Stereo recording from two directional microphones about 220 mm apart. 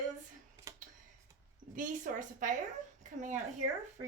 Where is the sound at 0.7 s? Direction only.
15° right (ahead or behind).